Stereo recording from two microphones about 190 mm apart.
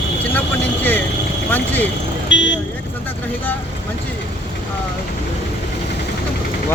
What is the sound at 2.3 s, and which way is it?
Speech, 75° left (ahead or behind).